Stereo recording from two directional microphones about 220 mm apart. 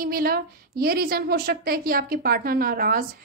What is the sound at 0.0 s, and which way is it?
A woman's voice, 45° right (ahead or behind).